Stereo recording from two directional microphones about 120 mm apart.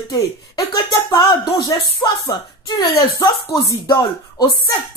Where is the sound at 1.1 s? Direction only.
40° left (ahead or behind).